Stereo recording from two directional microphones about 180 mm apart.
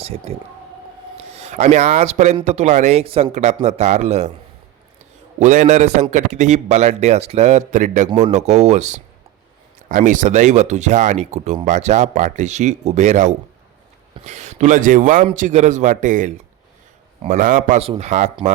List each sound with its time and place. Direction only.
0.0 s speech: 35° right (ahead or behind)
5.4 s a man's voice: 40° right (ahead or behind)